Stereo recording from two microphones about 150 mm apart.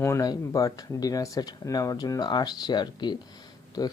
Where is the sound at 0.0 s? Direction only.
20° left (ahead or behind).